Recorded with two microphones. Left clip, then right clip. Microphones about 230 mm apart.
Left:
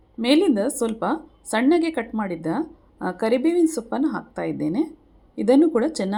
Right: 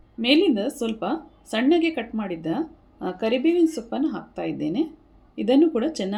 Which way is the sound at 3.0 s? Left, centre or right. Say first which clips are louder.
Left 2 dB; left.